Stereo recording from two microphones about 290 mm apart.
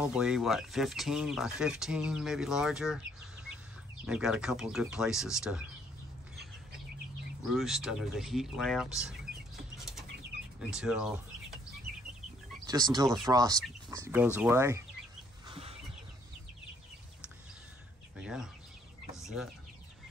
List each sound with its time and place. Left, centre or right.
0.0 s speech: centre
4.0 s speech: centre
7.5 s speech: centre
9.8 s bird flight: centre
10.6 s speech: centre
12.6 s speech: centre
15.4 s a sound: centre
18.2 s bird: centre
19.2 s speech: centre